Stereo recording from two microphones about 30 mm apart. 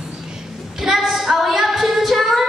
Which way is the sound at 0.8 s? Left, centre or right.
Centre.